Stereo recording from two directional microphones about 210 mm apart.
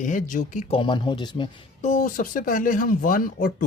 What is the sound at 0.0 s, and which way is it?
Speech, 40° left (ahead or behind).